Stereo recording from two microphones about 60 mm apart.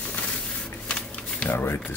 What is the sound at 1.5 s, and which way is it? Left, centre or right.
Speech, left.